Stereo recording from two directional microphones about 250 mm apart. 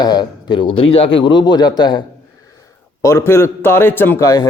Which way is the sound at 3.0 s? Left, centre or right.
Centre.